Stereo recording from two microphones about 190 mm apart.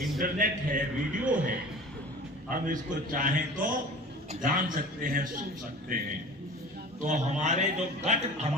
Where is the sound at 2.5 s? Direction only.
45° right (ahead or behind).